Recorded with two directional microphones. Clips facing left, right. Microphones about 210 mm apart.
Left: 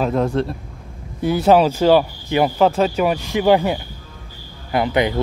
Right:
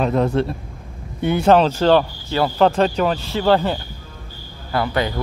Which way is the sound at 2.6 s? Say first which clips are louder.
Right 3 dB; 5° left (ahead or behind).